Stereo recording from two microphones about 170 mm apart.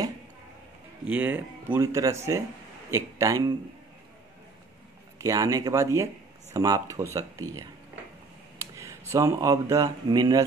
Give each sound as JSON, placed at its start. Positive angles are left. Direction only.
{"t": 1.0, "sound": "speech", "side_deg": -10}
{"t": 5.2, "sound": "speech", "side_deg": -20}